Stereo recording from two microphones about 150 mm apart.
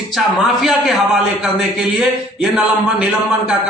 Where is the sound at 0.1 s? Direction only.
Centre (ahead or behind).